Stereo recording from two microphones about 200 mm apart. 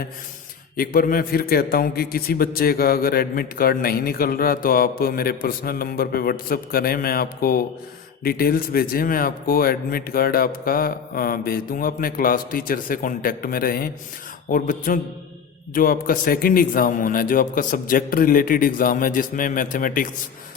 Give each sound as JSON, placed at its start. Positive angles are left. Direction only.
{"t": 0.8, "sound": "a man's voice", "side_deg": 45}